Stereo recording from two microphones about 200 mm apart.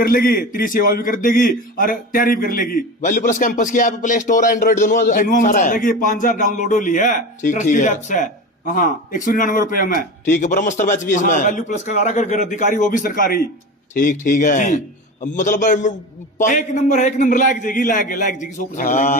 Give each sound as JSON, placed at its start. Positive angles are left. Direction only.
{"t": 0.0, "sound": "a man's voice", "side_deg": 45}